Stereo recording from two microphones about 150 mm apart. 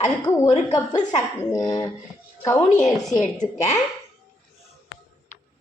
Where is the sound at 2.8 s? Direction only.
Centre (ahead or behind).